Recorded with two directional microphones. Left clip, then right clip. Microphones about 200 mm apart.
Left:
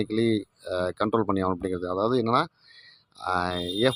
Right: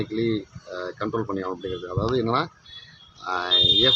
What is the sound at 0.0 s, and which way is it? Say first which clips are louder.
Speech: left 1 dB; 50° left (ahead or behind).